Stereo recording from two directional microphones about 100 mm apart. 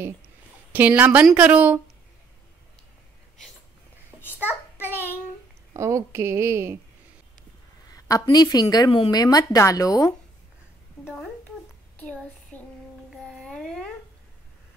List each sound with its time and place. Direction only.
0.7 s a woman's voice: 15° right (ahead or behind)
4.4 s child singing: 15° right (ahead or behind)
4.8 s child singing: 20° left (ahead or behind)
5.7 s a woman's voice: 30° right (ahead or behind)
7.9 s a woman's voice: 40° left (ahead or behind)
12.0 s child singing: 15° left (ahead or behind)
13.3 s babbling: 5° left (ahead or behind)